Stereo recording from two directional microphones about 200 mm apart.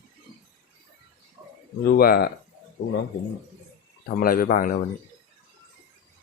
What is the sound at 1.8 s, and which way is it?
Speech, 50° left (ahead or behind).